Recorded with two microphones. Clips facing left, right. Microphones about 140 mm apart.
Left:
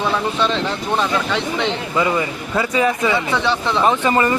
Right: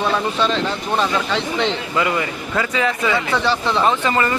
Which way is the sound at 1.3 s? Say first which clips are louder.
Even; 15° left (ahead or behind).